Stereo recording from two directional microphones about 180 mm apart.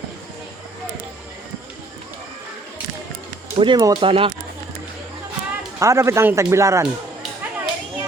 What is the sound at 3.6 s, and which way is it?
Speech, 25° right (ahead or behind).